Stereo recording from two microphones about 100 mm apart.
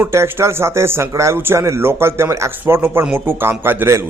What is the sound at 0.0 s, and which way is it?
A man's voice, 25° right (ahead or behind).